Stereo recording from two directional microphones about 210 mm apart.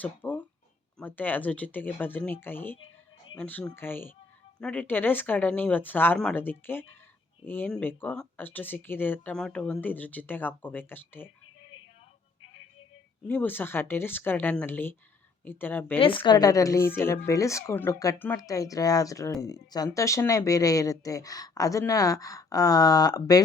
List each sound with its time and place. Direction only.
0.0 s speech: 10° left (ahead or behind)
13.2 s speech: 10° left (ahead or behind)
16.0 s a woman's voice: 25° left (ahead or behind)